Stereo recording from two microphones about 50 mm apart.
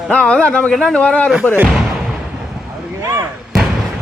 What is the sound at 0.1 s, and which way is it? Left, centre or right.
Speech, left.